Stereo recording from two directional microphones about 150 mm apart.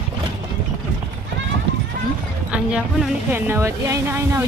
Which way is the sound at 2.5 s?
5° right (ahead or behind).